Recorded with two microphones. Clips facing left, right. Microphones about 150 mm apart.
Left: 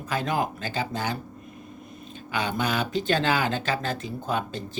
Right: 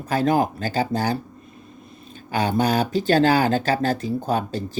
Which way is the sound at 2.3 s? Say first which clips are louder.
Right 6 dB; 40° right (ahead or behind).